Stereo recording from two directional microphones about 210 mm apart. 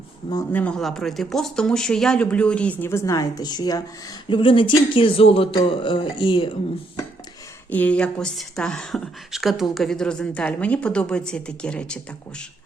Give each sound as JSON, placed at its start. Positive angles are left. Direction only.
{"t": 0.3, "sound": "speech", "side_deg": 15}
{"t": 0.6, "sound": "speech", "side_deg": 5}
{"t": 7.7, "sound": "speech", "side_deg": 5}